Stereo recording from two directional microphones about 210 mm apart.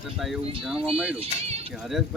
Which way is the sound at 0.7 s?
25° right (ahead or behind).